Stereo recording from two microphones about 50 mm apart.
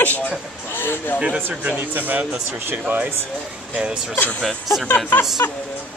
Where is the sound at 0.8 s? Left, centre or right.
Left.